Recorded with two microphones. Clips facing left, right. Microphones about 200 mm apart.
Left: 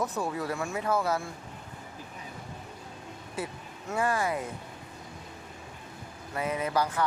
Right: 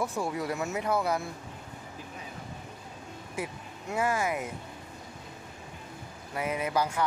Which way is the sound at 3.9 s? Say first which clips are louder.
Even; 10° right (ahead or behind).